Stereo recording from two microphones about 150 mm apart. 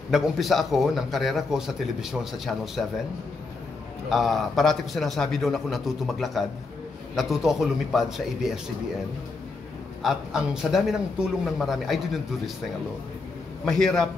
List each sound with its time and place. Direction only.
0.1 s a man's voice: centre (ahead or behind)
4.1 s a man's voice: centre (ahead or behind)
10.0 s a man's voice: centre (ahead or behind)
13.7 s a man's voice: 5° left (ahead or behind)